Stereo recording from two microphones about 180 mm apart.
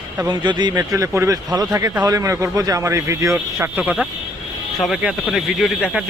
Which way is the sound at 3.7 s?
5° right (ahead or behind).